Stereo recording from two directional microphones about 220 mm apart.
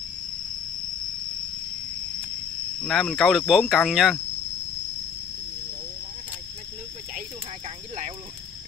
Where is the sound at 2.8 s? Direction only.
Centre (ahead or behind).